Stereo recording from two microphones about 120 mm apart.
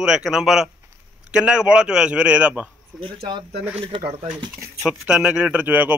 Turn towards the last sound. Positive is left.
turn(degrees=-15)  # may be behind; listen again after turning